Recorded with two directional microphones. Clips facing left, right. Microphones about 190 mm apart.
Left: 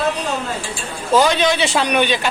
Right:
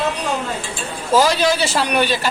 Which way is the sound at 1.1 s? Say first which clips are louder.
Even; 5° right (ahead or behind).